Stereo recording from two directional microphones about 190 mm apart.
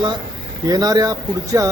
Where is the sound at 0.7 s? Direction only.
20° right (ahead or behind).